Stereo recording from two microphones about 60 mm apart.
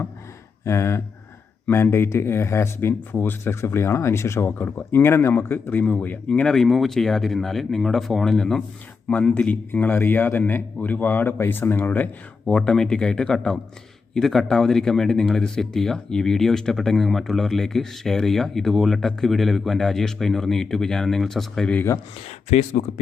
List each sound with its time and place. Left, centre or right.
0.6 s speech: left
3.1 s speech: left
5.8 s speech: left
6.5 s speech: centre; by 11.9 s left
12.5 s speech: centre